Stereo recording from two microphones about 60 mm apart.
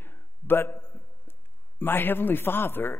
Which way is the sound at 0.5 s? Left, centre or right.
Left.